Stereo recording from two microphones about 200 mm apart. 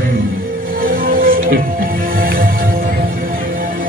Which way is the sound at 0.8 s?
45° right (ahead or behind).